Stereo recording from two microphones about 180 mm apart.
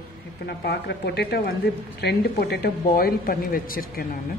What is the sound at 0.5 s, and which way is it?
A woman's voice, 65° left (ahead or behind).